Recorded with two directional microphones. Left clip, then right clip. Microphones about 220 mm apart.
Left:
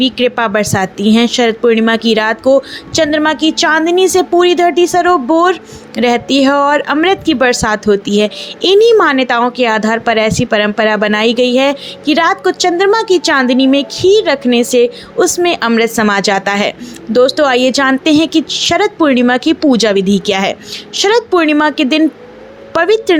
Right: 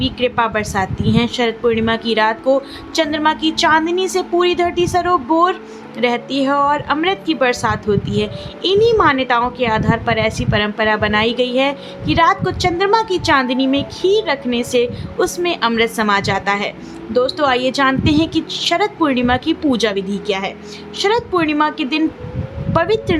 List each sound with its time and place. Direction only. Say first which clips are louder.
0.0 s a woman's voice: left 5 dB; 25° left (ahead or behind)